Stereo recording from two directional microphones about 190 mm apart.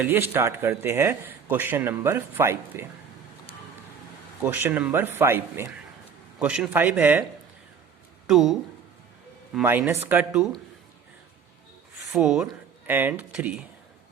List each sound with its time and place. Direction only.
0.0 s speech: 10° right (ahead or behind)
4.4 s speech: 10° right (ahead or behind)
8.3 s speech: centre (ahead or behind)
9.6 s speech: 10° right (ahead or behind)
12.1 s speech: centre (ahead or behind)